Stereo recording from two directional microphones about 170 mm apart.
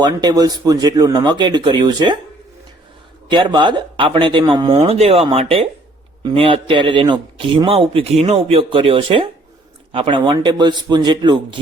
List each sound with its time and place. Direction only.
0.0 s speech: 25° right (ahead or behind)
3.2 s speech: 25° right (ahead or behind)